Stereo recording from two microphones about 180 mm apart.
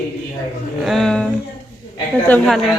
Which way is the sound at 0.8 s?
Centre (ahead or behind).